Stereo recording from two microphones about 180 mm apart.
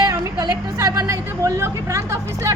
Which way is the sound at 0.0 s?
20° right (ahead or behind).